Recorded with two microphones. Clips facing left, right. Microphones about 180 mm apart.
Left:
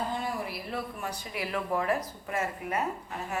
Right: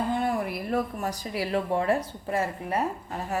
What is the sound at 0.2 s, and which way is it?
Speech, 55° right (ahead or behind).